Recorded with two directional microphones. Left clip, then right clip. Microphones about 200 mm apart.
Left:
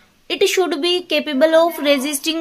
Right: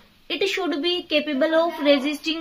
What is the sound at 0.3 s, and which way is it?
Speech, 45° left (ahead or behind).